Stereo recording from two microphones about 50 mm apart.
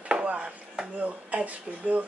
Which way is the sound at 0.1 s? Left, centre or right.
Centre.